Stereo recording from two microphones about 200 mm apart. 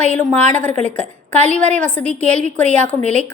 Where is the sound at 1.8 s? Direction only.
5° left (ahead or behind).